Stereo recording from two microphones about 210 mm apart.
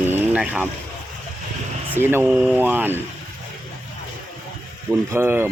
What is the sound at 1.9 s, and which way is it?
Speech, 10° right (ahead or behind).